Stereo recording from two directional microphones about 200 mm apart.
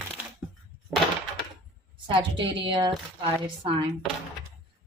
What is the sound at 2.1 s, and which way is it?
Speech, 25° right (ahead or behind).